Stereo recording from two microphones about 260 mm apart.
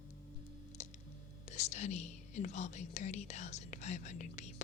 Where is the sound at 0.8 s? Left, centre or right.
Left.